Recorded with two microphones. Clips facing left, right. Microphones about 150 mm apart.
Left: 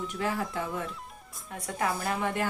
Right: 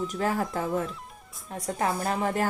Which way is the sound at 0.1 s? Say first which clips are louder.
Right 4 dB; 40° right (ahead or behind).